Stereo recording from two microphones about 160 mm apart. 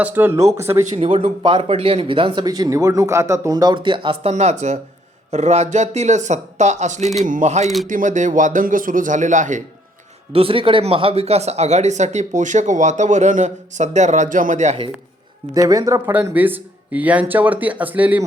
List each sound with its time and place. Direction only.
0.0 s speech: 10° right (ahead or behind)
0.9 s speech: 35° right (ahead or behind); by 9.6 s 50° right (ahead or behind)
10.3 s speech: 35° right (ahead or behind)
15.5 s speech: 20° right (ahead or behind)